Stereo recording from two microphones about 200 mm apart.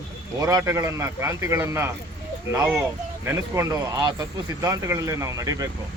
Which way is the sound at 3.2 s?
15° right (ahead or behind).